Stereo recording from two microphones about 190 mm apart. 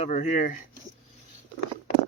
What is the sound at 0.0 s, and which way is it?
Speech, 40° left (ahead or behind).